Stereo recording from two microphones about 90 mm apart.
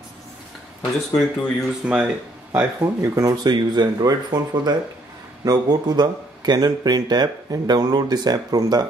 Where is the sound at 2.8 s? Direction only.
35° right (ahead or behind).